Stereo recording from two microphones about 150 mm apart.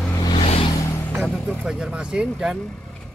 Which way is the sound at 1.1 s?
Centre (ahead or behind).